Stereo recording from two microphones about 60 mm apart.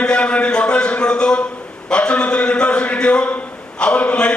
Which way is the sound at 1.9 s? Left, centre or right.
Centre.